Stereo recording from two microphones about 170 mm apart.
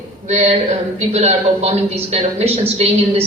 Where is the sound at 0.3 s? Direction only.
40° right (ahead or behind).